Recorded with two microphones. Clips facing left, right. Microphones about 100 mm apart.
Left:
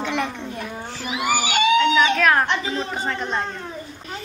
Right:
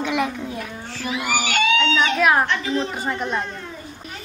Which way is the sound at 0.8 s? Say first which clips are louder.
Left 1 dB; 20° left (ahead or behind).